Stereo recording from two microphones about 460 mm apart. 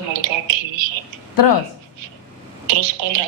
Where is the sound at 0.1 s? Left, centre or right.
Right.